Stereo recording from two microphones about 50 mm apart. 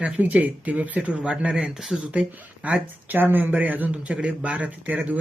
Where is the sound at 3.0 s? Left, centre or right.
Right.